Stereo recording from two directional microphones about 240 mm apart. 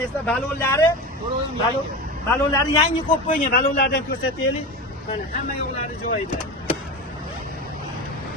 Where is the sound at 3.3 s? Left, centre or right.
Left.